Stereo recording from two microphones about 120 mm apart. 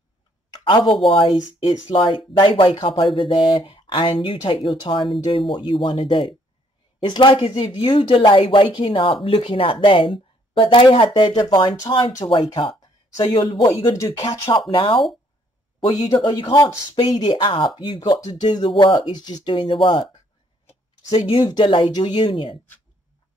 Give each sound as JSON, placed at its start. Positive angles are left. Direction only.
{"t": 0.7, "sound": "speech", "side_deg": 40}
{"t": 14.7, "sound": "speech", "side_deg": 45}
{"t": 16.1, "sound": "speech", "side_deg": 40}
{"t": 21.3, "sound": "speech", "side_deg": 40}